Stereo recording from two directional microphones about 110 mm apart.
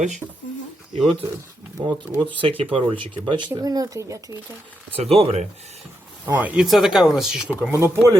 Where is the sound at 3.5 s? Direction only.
35° right (ahead or behind).